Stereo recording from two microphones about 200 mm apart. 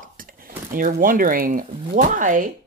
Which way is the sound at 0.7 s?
45° right (ahead or behind).